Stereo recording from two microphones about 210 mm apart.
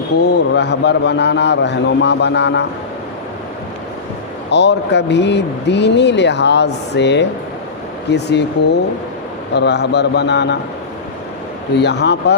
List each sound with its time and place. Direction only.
0.3 s a man's voice: 55° left (ahead or behind)
4.5 s a man's voice: 55° left (ahead or behind)
11.8 s a man's voice: 55° left (ahead or behind)